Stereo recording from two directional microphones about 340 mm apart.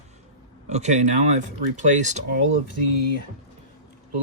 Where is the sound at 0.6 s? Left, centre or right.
Centre.